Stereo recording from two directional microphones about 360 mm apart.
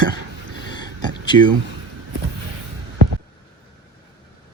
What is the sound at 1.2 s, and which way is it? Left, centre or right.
Speech, centre.